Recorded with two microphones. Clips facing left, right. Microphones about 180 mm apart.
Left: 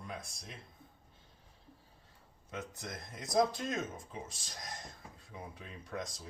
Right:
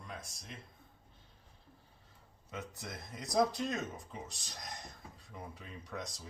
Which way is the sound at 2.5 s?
Centre (ahead or behind).